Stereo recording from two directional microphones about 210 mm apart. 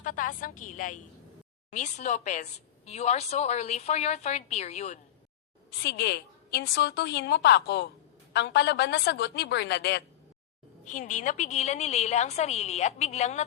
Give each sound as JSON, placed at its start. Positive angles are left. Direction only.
{"t": 0.0, "sound": "a woman's voice", "side_deg": 40}
{"t": 5.7, "sound": "a woman's voice", "side_deg": 50}
{"t": 10.8, "sound": "a woman's voice", "side_deg": 35}